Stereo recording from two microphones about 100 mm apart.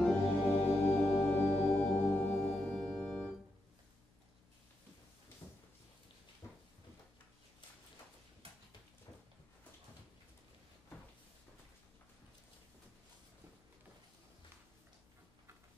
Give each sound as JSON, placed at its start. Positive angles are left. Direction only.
{"t": 0.0, "sound": "organ", "side_deg": 10}
{"t": 0.7, "sound": "organ", "side_deg": 25}